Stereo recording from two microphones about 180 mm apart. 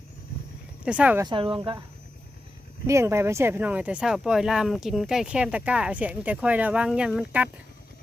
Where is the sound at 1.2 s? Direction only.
30° right (ahead or behind).